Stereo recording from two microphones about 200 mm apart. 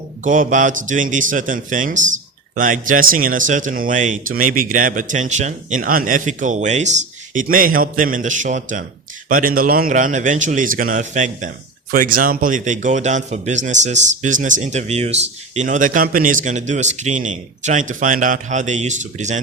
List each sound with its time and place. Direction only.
0.3 s a man's voice: 40° right (ahead or behind)